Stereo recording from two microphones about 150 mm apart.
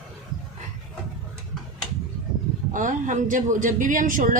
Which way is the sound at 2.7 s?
60° right (ahead or behind).